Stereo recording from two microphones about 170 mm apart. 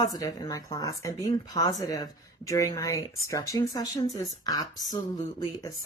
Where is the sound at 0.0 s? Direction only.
20° left (ahead or behind).